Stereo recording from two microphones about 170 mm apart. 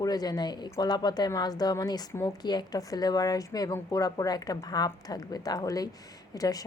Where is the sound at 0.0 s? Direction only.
25° left (ahead or behind).